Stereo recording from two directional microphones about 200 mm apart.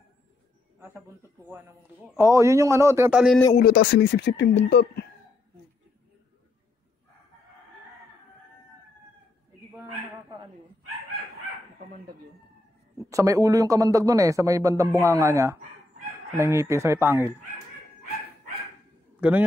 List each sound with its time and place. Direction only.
0.7 s a man's voice: 10° right (ahead or behind)
2.1 s speech: 15° right (ahead or behind)
3.5 s speech: 45° left (ahead or behind)
13.1 s speech: 15° right (ahead or behind)
19.1 s a sound: 10° right (ahead or behind)